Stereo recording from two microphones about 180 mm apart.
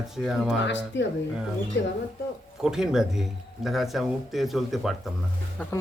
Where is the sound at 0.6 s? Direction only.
85° left.